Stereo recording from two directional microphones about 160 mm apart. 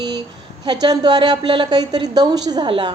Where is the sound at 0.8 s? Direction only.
25° right (ahead or behind).